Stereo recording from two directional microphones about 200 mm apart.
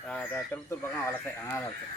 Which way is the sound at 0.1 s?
10° left (ahead or behind).